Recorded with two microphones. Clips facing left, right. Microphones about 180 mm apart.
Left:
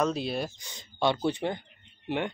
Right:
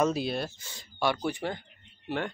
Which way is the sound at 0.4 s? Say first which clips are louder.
Left 1 dB; 15° left (ahead or behind).